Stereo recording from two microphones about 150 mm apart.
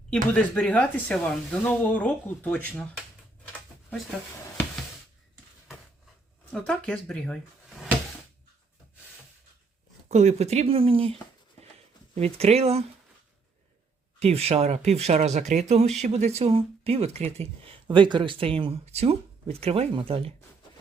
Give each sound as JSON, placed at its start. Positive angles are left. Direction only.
{"t": 0.1, "sound": "speech", "side_deg": 10}
{"t": 6.5, "sound": "speech", "side_deg": 5}
{"t": 10.1, "sound": "speech", "side_deg": -50}
{"t": 14.2, "sound": "speech", "side_deg": -45}
{"t": 17.8, "sound": "speech", "side_deg": -30}